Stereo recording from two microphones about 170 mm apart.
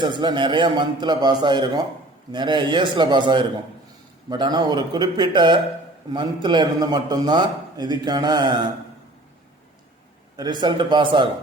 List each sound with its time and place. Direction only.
0.0 s a man's voice: 30° right (ahead or behind)
10.3 s a man's voice: 25° right (ahead or behind)